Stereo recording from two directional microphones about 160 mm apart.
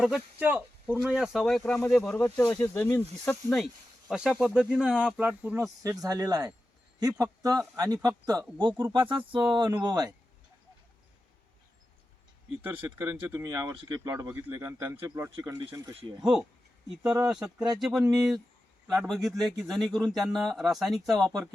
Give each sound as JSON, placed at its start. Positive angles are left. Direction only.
{"t": 0.0, "sound": "speech", "side_deg": -5}
{"t": 5.8, "sound": "speech", "side_deg": -20}
{"t": 12.6, "sound": "speech", "side_deg": -10}
{"t": 17.2, "sound": "speech", "side_deg": -5}